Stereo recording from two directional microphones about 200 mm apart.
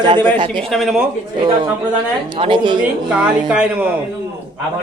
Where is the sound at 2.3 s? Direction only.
25° right (ahead or behind).